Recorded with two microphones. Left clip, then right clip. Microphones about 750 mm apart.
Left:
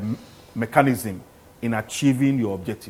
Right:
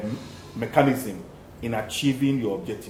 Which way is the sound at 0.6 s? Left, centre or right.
Left.